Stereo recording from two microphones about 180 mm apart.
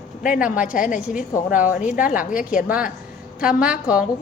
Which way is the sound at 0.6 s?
50° left (ahead or behind).